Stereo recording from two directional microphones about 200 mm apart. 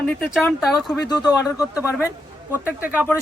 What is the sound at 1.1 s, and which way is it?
Speech, 20° left (ahead or behind).